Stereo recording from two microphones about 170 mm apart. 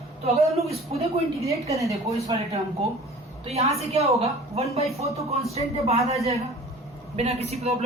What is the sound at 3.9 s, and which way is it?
Speech, 35° right (ahead or behind).